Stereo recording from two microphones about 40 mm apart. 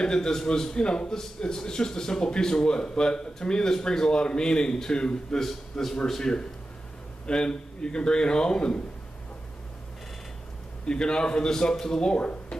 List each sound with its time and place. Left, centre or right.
0.0 s a man's voice: centre
5.4 s a man's voice: centre
6.3 s a man's voice: centre
10.9 s a man's voice: left